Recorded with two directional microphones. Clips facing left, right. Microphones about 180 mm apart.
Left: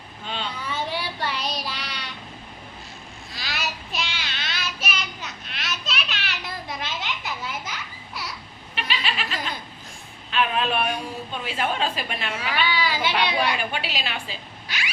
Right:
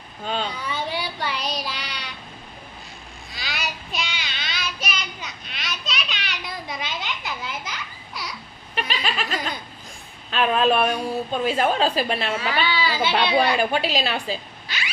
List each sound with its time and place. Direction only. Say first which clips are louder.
0.3 s a sound: right 5 dB; 40° right (ahead or behind)
0.7 s child singing: right 1 dB; centre (ahead or behind)
3.3 s child singing: even; centre (ahead or behind)
8.7 s snicker: right 2 dB; 40° right (ahead or behind)
10.3 s a woman's voice: right 4 dB; 40° right (ahead or behind)
12.8 s speech: right 2 dB; 10° left (ahead or behind)
13.5 s a woman's voice: right 7 dB; 40° right (ahead or behind)